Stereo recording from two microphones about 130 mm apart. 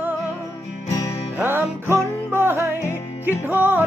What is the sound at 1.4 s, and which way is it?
Music, 15° right (ahead or behind).